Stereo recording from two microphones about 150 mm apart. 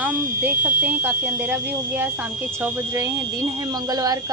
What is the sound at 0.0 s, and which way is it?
Speech, 10° right (ahead or behind).